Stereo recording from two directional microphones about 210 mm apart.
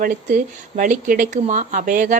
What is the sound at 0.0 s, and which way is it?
A woman's voice, 40° right (ahead or behind).